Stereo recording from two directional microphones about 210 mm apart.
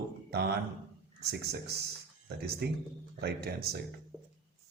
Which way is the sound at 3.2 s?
50° right (ahead or behind).